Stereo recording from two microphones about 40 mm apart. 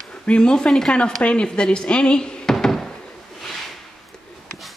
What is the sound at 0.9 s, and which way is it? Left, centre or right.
Speech, left.